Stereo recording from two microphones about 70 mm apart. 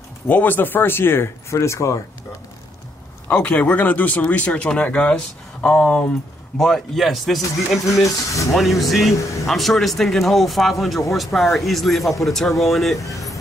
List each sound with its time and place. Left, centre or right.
0.3 s speech: left
3.3 s speech: centre
6.6 s speech: centre
8.0 s speech: left
8.5 s speech: centre